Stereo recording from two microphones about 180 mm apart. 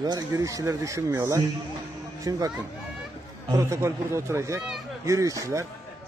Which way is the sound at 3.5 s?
15° right (ahead or behind).